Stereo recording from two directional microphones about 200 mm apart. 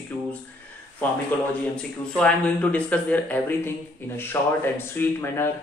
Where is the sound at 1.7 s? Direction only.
5° left (ahead or behind).